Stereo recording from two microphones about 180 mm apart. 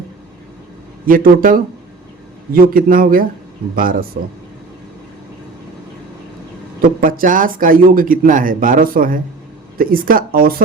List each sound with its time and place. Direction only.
1.0 s speech: 50° right (ahead or behind)
6.8 s speech: 50° right (ahead or behind)